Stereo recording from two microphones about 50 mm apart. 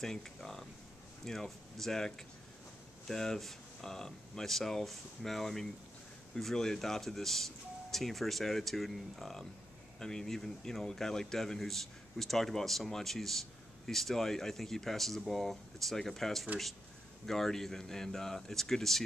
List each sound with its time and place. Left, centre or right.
0.0 s speech: centre